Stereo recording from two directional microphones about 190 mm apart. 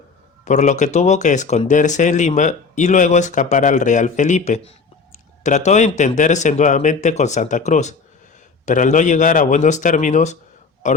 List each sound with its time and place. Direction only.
0.4 s speech: 40° left (ahead or behind)